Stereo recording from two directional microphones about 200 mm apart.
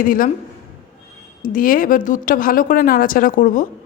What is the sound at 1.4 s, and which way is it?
Speech, 40° left (ahead or behind).